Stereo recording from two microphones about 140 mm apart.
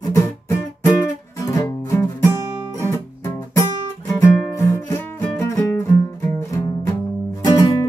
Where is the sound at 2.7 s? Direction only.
20° left (ahead or behind).